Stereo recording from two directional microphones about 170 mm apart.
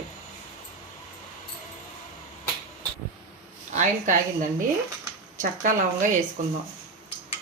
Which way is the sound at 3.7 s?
45° right (ahead or behind).